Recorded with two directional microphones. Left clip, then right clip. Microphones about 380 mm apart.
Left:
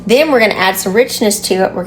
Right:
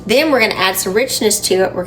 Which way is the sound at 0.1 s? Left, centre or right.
Centre.